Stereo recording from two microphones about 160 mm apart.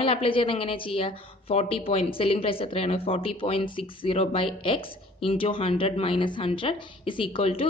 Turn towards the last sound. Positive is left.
turn(degrees=35)  # may be behind; listen again after turning